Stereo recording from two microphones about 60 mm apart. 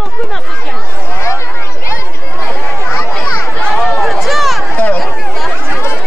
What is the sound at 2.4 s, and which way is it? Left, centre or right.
Chatter, left.